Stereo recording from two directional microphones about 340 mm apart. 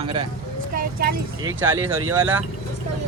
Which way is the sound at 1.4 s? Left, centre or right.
Centre.